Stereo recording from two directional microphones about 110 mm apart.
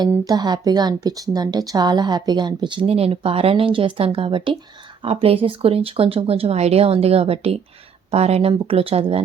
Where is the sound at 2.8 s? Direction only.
65° right (ahead or behind).